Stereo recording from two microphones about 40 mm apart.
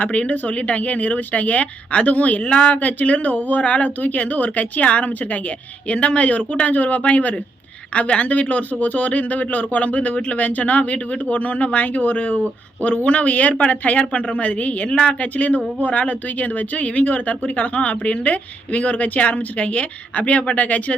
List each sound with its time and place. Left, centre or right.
0.0 s speech: left
2.5 s speech: left
2.7 s speech: left
15.4 s speech: left